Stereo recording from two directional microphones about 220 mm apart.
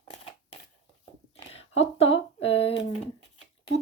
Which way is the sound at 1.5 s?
25° left (ahead or behind).